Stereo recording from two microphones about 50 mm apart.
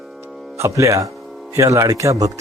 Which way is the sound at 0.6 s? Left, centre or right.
Right.